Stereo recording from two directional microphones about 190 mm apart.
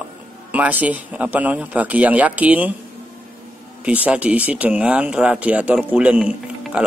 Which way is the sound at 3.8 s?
5° right (ahead or behind).